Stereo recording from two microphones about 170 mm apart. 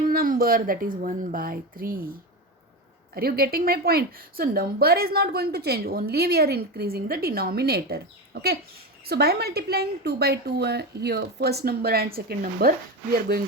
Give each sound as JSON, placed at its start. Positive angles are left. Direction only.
{"t": 0.1, "sound": "speech", "side_deg": -60}
{"t": 3.2, "sound": "a woman's voice", "side_deg": -65}